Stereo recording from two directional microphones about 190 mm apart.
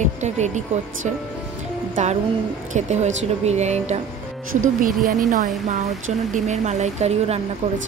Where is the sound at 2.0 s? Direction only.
40° right (ahead or behind).